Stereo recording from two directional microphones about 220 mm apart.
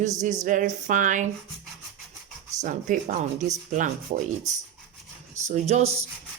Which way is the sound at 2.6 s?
35° right (ahead or behind).